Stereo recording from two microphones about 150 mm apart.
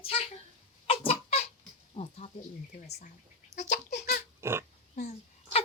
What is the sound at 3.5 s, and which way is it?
Goat, 55° left (ahead or behind).